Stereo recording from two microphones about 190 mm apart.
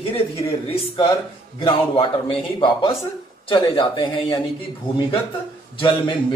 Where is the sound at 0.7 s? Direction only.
25° left (ahead or behind).